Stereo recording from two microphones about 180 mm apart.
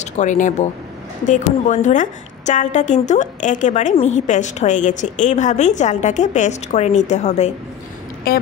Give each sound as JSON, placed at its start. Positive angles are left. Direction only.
{"t": 0.0, "sound": "a woman's voice", "side_deg": 45}
{"t": 8.3, "sound": "speech", "side_deg": 55}